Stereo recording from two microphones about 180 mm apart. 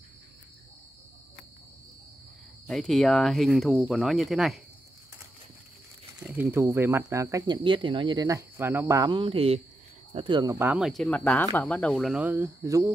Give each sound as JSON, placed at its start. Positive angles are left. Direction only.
{"t": 2.6, "sound": "speech", "side_deg": 0}
{"t": 6.2, "sound": "speech", "side_deg": -10}